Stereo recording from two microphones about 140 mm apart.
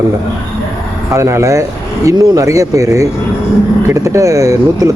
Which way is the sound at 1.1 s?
20° right (ahead or behind).